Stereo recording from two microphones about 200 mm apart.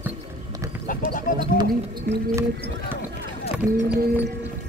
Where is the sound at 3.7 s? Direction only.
50° right (ahead or behind).